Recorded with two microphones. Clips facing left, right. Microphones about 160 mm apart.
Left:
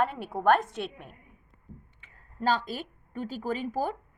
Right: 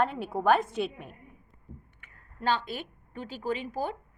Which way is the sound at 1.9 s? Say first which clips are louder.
Left 8 dB; 35° left (ahead or behind).